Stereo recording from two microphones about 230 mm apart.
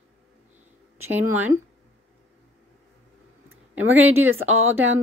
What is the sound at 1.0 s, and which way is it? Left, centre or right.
Speech, centre.